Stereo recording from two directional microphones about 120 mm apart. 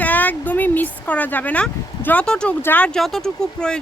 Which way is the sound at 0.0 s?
15° left (ahead or behind).